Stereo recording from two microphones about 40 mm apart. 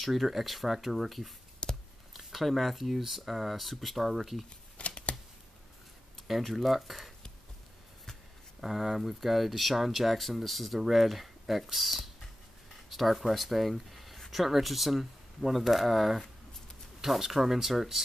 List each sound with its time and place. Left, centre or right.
0.0 s speech: centre
1.6 s a sound: left
2.1 s speech: centre
4.7 s shuffling cards: left
6.2 s speech: centre
8.5 s speech: centre